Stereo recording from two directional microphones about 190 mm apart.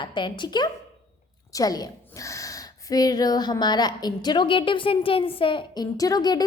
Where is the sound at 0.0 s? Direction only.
25° left (ahead or behind).